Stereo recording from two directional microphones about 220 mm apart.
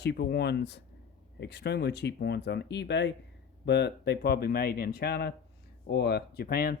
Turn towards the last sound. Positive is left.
turn(degrees=45)  # may be behind; listen again after turning